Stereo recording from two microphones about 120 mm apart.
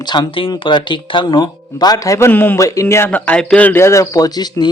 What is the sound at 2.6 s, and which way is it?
Speech, 25° left (ahead or behind).